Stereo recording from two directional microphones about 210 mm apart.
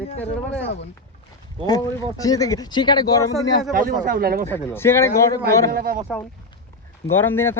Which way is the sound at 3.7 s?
40° right (ahead or behind).